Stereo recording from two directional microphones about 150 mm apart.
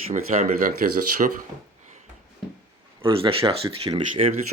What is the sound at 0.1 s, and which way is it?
Speech, 55° right (ahead or behind).